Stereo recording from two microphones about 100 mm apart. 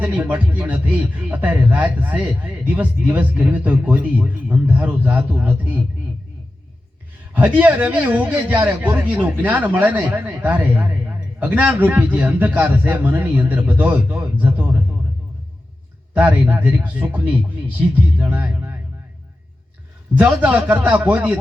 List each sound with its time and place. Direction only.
0.0 s a man's voice: 20° right (ahead or behind)
7.3 s a man's voice: 15° right (ahead or behind)
16.1 s a man's voice: 20° right (ahead or behind)
20.1 s a man's voice: 15° right (ahead or behind)